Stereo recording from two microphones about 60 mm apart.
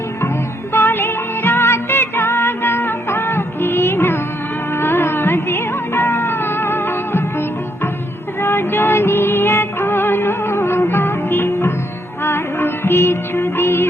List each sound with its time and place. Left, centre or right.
0.7 s music: left